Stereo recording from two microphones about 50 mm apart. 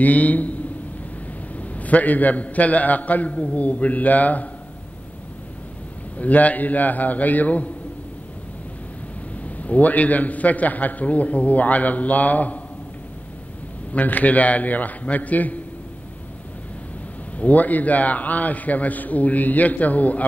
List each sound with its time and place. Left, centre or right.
0.0 s a man's voice: left
1.6 s a man's voice: left
6.1 s a man's voice: left
9.4 s a man's voice: left
13.9 s a man's voice: left
17.4 s a man's voice: left